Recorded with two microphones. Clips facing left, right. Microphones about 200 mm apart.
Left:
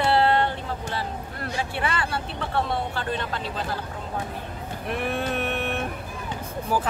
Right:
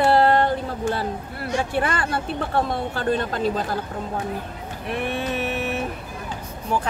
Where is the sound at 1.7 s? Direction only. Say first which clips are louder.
Right 4 dB; 45° right (ahead or behind).